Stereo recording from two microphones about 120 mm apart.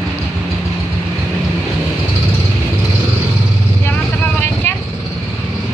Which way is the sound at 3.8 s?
15° left (ahead or behind).